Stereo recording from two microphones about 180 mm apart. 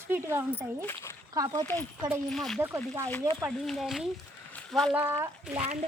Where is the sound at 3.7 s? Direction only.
Centre (ahead or behind).